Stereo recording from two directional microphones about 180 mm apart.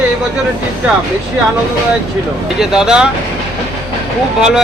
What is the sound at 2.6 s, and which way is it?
Speech, 5° right (ahead or behind).